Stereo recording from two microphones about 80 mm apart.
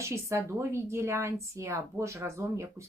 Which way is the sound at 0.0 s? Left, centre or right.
Right.